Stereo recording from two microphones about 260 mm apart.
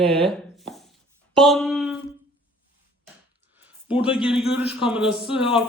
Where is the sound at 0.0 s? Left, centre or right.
Right.